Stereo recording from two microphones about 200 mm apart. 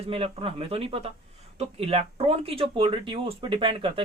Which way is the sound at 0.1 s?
30° right (ahead or behind).